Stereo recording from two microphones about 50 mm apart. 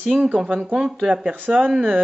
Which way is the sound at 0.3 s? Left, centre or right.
Centre.